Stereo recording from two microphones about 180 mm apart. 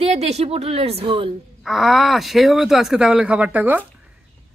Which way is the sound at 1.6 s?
Centre (ahead or behind).